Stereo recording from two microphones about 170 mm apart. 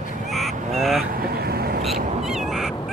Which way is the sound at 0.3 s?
Centre (ahead or behind).